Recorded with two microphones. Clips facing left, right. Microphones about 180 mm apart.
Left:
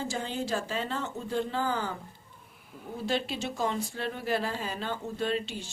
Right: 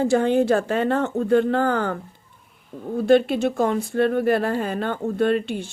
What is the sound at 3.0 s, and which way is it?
Speech, 55° right (ahead or behind).